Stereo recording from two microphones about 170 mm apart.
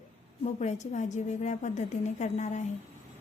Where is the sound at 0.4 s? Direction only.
45° left (ahead or behind).